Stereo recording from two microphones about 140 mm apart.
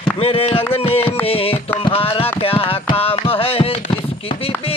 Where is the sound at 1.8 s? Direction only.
40° left (ahead or behind).